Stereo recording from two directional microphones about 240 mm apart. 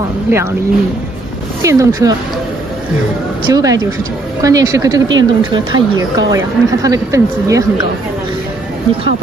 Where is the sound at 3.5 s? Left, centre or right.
Centre.